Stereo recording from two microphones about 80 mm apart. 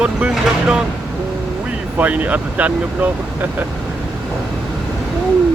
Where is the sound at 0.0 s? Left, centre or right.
Centre.